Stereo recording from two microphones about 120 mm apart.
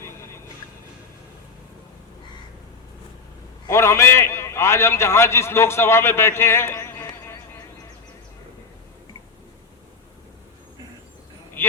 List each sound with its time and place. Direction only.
3.7 s a man's voice: 25° left (ahead or behind)
11.6 s vehicle: 20° left (ahead or behind)